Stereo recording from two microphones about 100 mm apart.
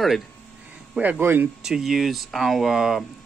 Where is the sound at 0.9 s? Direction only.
15° right (ahead or behind).